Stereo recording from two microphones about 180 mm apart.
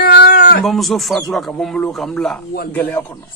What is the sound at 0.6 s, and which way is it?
Speech, centre (ahead or behind).